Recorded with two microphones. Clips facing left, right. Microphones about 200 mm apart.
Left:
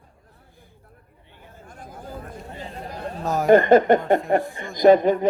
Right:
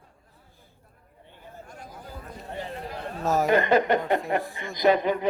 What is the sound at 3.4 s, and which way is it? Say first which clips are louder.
Speech: left 9 dB; 50° left (ahead or behind).